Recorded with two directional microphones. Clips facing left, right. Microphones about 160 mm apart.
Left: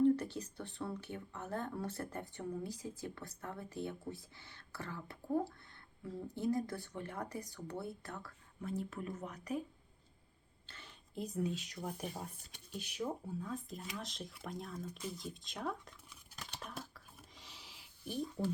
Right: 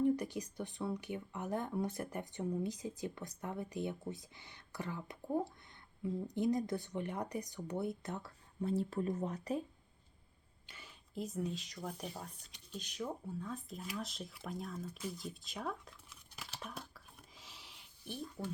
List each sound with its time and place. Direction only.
0.0 s speech: 15° right (ahead or behind)
10.7 s speech: 10° right (ahead or behind)
14.9 s a sound: 5° right (ahead or behind)